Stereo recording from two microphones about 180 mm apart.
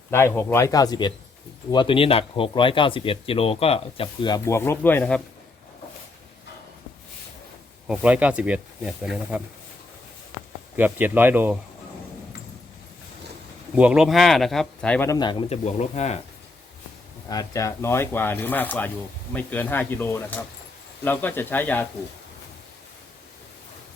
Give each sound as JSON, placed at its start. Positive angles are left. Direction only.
{"t": 0.1, "sound": "speech", "side_deg": 15}
{"t": 7.9, "sound": "speech", "side_deg": -5}
{"t": 10.8, "sound": "speech", "side_deg": -10}
{"t": 13.7, "sound": "speech", "side_deg": -5}
{"t": 17.2, "sound": "speech", "side_deg": 20}